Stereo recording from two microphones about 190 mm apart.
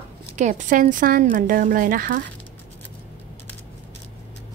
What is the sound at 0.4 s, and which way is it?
Speech, 40° right (ahead or behind).